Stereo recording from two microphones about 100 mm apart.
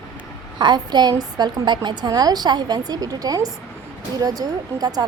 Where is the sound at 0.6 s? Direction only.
45° right (ahead or behind).